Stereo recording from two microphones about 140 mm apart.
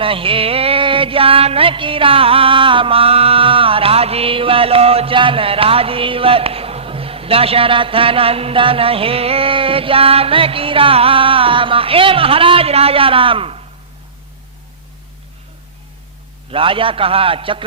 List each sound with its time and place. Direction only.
0.0 s music: 40° right (ahead or behind)
16.5 s music: 40° right (ahead or behind)